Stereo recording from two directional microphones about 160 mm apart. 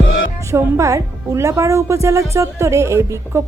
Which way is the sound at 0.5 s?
20° right (ahead or behind).